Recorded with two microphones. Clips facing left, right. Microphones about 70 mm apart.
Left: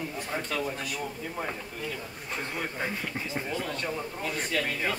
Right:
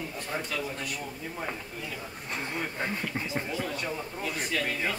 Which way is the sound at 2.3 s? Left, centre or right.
Centre.